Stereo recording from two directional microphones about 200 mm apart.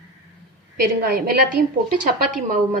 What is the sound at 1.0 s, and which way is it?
A woman's voice, 50° right (ahead or behind).